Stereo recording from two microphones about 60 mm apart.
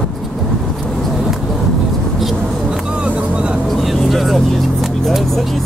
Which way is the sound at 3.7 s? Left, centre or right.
Centre.